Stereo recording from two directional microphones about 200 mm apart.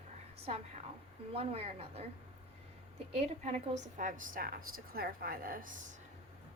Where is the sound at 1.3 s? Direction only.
30° right (ahead or behind).